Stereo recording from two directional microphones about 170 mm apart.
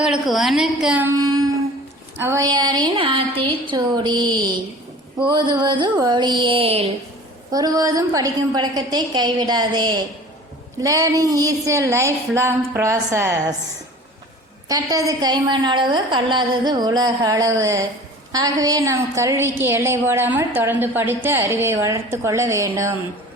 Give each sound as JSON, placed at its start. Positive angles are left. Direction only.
{"t": 0.0, "sound": "a woman's voice", "side_deg": 0}
{"t": 1.2, "sound": "humming", "side_deg": -25}
{"t": 2.1, "sound": "a woman's voice", "side_deg": -15}
{"t": 7.5, "sound": "a woman's voice", "side_deg": -20}
{"t": 14.7, "sound": "a woman's voice", "side_deg": -20}